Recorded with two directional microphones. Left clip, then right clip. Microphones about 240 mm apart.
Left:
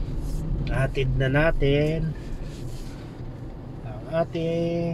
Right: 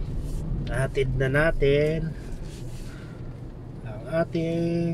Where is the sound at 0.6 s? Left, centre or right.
Centre.